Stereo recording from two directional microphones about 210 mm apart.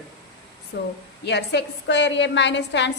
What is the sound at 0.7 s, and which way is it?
A woman's voice, 55° left (ahead or behind).